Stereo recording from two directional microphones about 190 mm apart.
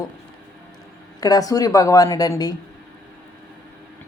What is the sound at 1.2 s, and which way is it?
A woman's voice, 20° left (ahead or behind).